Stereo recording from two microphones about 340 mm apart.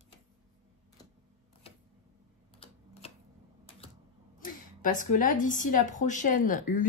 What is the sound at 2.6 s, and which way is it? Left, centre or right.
Typewriter, centre.